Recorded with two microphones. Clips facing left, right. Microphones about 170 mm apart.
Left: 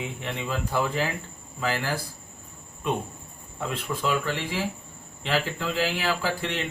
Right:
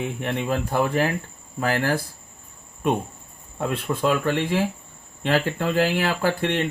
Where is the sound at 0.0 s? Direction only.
60° right (ahead or behind).